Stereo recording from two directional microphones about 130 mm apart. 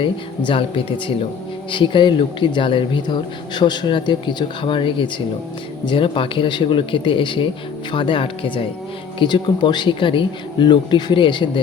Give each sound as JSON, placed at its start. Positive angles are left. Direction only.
{"t": 0.0, "sound": "speech", "side_deg": 40}